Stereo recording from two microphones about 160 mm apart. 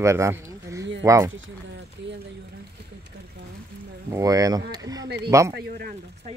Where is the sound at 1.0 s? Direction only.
20° right (ahead or behind).